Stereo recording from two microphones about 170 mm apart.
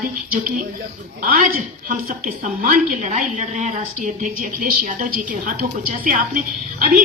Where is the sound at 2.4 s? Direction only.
55° right (ahead or behind).